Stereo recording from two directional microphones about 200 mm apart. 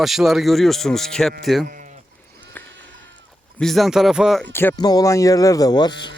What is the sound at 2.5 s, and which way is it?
Sheep, 10° left (ahead or behind).